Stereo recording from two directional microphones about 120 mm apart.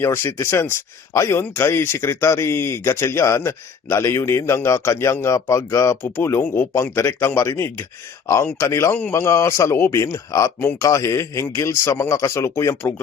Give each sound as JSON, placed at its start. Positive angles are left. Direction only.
{"t": 0.0, "sound": "speech", "side_deg": 20}